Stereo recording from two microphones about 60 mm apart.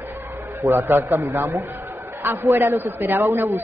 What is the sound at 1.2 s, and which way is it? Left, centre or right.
A man's voice, right.